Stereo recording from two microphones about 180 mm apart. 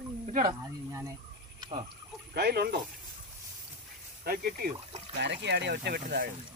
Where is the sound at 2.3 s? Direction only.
60° right (ahead or behind).